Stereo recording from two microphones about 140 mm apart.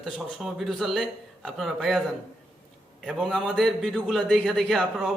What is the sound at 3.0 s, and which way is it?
Speech, centre (ahead or behind).